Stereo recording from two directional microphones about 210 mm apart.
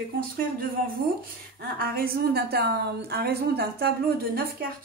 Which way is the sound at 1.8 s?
45° right (ahead or behind).